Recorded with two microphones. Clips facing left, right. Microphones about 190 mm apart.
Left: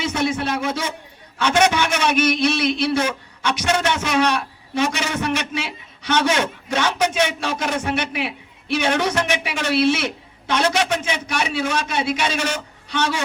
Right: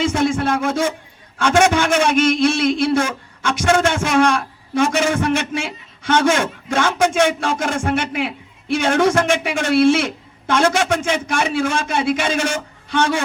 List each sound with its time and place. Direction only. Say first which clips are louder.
0.0 s music: right 4 dB; 50° right (ahead or behind)
1.4 s a man's voice: right 3 dB; 50° right (ahead or behind)